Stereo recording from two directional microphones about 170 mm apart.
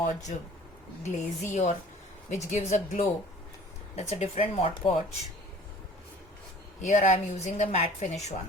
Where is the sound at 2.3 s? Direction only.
45° left (ahead or behind).